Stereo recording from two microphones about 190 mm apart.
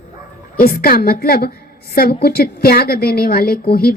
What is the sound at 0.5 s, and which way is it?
A woman's voice, 50° left (ahead or behind).